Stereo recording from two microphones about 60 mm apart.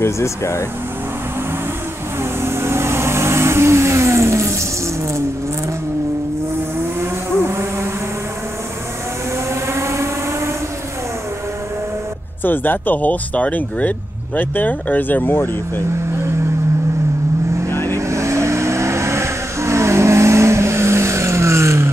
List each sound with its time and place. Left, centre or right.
0.0 s speech: left
2.4 s vehicle: right
7.0 s vehicle: right
9.5 s vehicle: right
12.4 s speech: left
17.6 s vehicle: left
17.9 s vehicle: right